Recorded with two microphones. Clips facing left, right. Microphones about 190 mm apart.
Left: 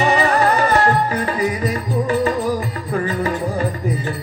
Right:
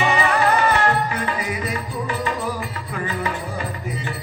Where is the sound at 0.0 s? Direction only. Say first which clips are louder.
Left 3 dB; 40° left (ahead or behind).